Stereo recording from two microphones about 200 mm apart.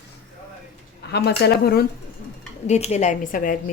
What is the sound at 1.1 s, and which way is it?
Speech, 55° left (ahead or behind).